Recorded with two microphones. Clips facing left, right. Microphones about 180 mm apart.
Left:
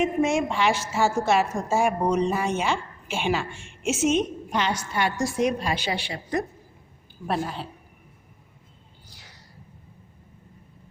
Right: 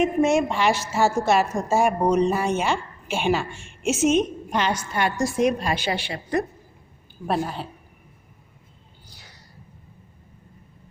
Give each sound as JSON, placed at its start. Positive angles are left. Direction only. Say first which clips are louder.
{"t": 0.0, "sound": "a woman's voice", "louder": "right 3 dB", "side_deg": -40}